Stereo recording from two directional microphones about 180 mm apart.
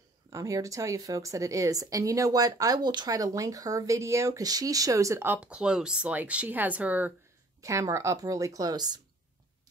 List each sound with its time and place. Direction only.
0.3 s a woman's voice: 20° right (ahead or behind)